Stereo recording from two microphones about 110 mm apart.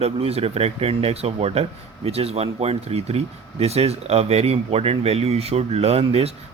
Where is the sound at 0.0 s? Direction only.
70° right (ahead or behind).